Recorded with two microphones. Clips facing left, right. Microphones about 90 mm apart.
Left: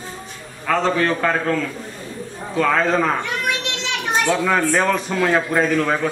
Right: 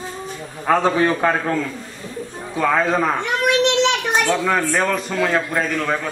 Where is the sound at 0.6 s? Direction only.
15° right (ahead or behind).